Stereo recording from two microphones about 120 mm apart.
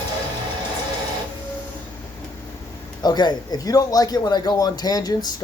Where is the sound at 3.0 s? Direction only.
35° left (ahead or behind).